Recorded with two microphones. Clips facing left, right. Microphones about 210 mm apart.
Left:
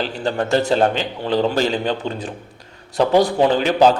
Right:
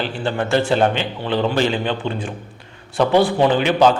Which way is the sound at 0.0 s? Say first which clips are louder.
Left 1 dB; 40° left (ahead or behind).